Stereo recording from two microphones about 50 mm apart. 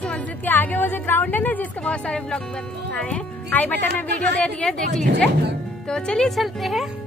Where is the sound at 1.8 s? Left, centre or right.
Left.